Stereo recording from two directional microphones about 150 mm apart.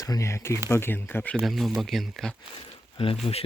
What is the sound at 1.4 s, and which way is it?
Speech, centre (ahead or behind).